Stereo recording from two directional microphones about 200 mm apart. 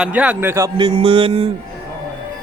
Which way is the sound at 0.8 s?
25° right (ahead or behind).